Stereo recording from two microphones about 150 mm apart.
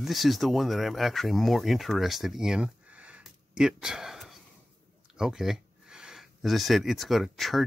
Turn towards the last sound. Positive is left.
turn(degrees=0)  # may be behind; listen again after turning